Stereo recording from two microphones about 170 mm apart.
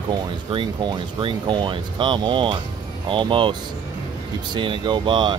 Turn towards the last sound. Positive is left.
turn(degrees=-30)  # may be behind; listen again after turning